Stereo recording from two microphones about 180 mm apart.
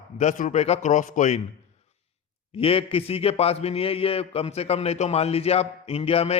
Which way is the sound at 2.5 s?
30° left (ahead or behind).